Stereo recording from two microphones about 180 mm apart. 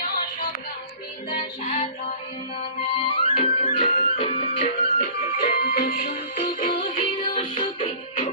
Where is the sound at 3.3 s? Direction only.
40° left (ahead or behind).